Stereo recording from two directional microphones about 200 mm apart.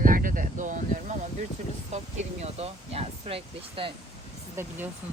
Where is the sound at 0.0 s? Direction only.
45° right (ahead or behind).